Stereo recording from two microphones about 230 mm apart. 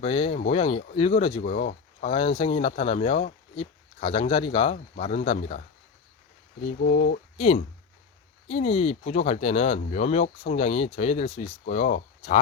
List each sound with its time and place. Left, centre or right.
0.0 s speech: left
6.8 s speech: left
7.3 s speech: left